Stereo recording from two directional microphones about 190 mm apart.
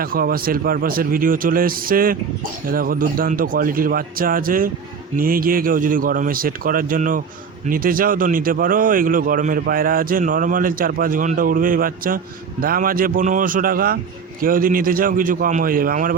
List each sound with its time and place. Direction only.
0.0 s speech: 50° right (ahead or behind)